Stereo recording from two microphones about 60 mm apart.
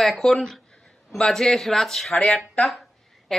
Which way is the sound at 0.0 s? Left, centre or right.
Centre.